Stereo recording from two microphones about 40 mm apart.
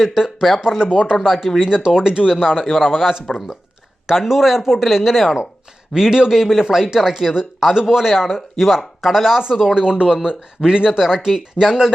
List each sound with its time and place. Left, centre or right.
0.0 s a man's voice: centre
0.8 s speech: centre
2.6 s a man's voice: centre
9.7 s speech: centre